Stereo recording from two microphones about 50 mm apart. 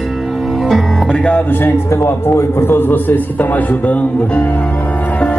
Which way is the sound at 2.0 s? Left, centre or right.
Left.